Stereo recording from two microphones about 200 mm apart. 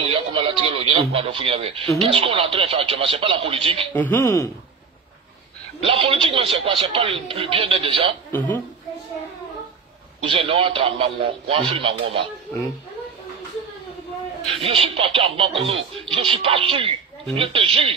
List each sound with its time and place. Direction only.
0.1 s radio: 25° right (ahead or behind)
2.0 s speech: 25° right (ahead or behind)
3.9 s speech: 10° left (ahead or behind)
5.9 s speech: 25° right (ahead or behind)
8.3 s speech: 10° left (ahead or behind)
10.2 s speech: 25° right (ahead or behind)
14.6 s speech: 25° right (ahead or behind)